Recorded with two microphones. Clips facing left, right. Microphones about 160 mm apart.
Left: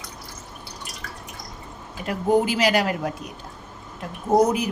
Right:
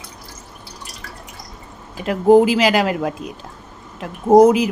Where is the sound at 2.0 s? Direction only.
90° right.